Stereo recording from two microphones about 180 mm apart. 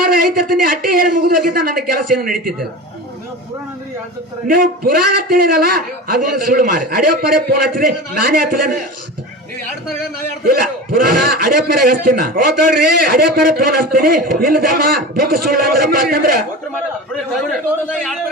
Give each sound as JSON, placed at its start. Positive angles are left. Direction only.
{"t": 0.0, "sound": "a man's voice", "side_deg": -55}
{"t": 4.4, "sound": "a man's voice", "side_deg": -55}
{"t": 10.5, "sound": "a man's voice", "side_deg": -55}